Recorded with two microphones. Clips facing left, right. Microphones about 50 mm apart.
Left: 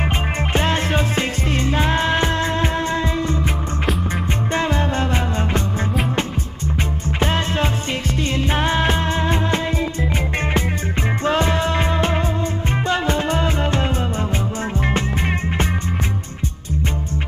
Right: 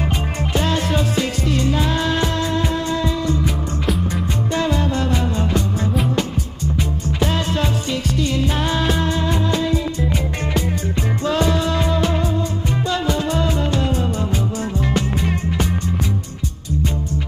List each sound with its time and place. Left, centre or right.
0.5 s music: left
4.5 s music: left
7.2 s music: left
11.2 s music: left